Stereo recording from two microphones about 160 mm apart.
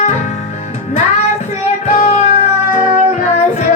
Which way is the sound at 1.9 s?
45° left (ahead or behind).